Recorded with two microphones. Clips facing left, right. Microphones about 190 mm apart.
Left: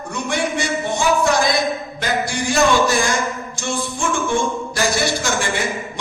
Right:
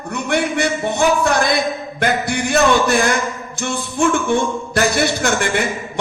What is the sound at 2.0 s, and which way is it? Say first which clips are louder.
Music: right 4 dB; 60° right (ahead or behind).